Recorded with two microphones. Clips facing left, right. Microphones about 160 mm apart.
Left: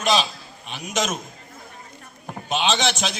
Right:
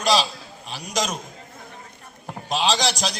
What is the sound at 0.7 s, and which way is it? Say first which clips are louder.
Speech: left 1 dB; 35° right (ahead or behind).